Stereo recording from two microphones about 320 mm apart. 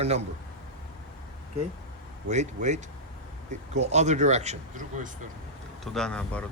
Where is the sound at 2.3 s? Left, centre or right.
Right.